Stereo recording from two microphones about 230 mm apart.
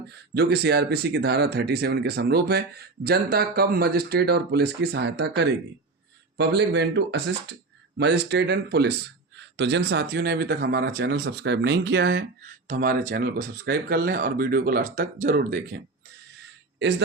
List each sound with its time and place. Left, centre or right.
0.3 s speech: right
12.6 s speech: right